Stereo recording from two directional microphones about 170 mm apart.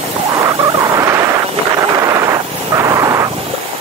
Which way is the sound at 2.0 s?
20° right (ahead or behind).